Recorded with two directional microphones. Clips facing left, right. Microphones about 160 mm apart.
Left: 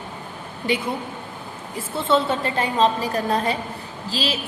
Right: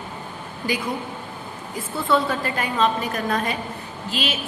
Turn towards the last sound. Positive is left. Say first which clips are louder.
# left 1 dB
turn(degrees=35)  # may be behind; listen again after turning